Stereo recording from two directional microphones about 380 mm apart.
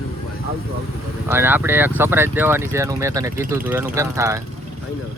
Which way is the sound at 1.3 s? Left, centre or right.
Centre.